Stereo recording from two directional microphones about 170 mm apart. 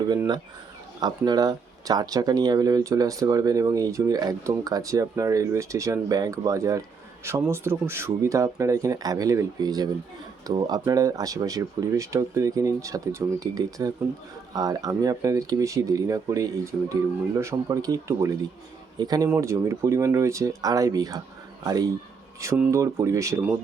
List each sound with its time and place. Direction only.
0.9 s speech: 25° right (ahead or behind)